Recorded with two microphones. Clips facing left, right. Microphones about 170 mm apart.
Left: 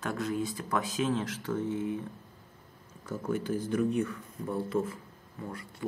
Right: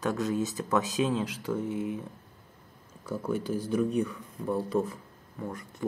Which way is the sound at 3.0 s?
10° right (ahead or behind).